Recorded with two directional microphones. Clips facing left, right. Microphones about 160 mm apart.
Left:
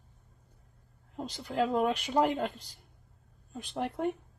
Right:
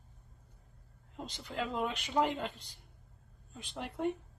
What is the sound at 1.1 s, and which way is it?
Speech, 50° left (ahead or behind).